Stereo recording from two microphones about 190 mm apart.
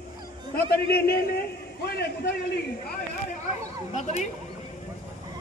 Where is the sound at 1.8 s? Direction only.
60° left (ahead or behind).